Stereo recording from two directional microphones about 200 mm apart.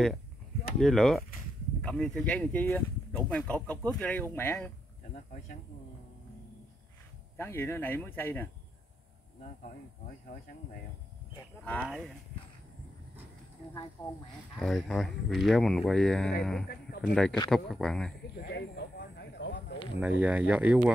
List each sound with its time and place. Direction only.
0.7 s speech: centre (ahead or behind)
7.3 s speech: 10° left (ahead or behind)
11.6 s speech: 5° left (ahead or behind)
14.0 s speech: 20° left (ahead or behind)
14.6 s speech: centre (ahead or behind)
18.4 s a sound: 55° left (ahead or behind)
20.0 s speech: 5° right (ahead or behind)